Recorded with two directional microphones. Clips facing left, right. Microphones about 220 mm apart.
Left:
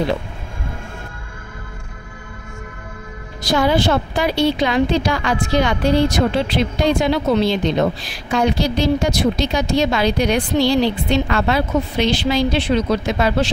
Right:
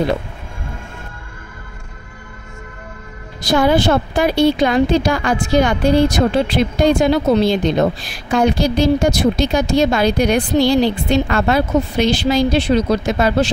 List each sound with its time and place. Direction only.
3.4 s a woman's voice: 50° right (ahead or behind)